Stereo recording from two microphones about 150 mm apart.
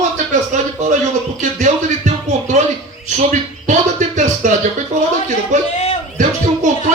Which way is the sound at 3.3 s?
55° right (ahead or behind).